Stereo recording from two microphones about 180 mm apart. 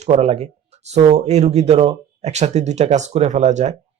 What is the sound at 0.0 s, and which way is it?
Speech, 35° right (ahead or behind).